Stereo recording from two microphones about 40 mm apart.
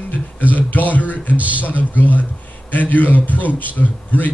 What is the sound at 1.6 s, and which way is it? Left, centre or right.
A man's voice, left.